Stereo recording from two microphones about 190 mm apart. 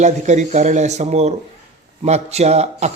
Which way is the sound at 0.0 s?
40° right (ahead or behind).